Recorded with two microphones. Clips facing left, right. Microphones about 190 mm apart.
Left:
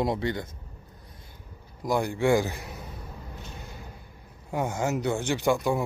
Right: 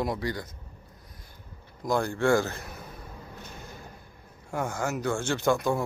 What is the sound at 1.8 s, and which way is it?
Speech, 15° left (ahead or behind).